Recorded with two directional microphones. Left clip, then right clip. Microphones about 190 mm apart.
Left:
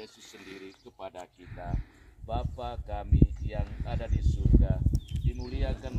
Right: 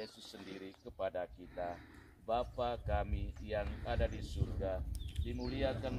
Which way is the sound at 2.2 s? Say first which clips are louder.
Even; 15° right (ahead or behind).